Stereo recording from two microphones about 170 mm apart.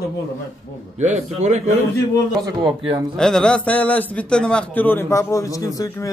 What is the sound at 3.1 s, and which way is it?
A man's voice, 5° left (ahead or behind).